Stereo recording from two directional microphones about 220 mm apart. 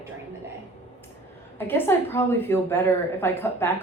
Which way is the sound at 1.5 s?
10° left (ahead or behind).